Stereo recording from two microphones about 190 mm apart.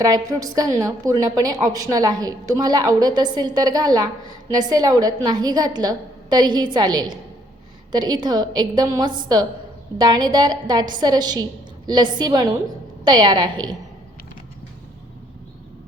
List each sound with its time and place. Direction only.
0.0 s a woman's voice: 20° right (ahead or behind)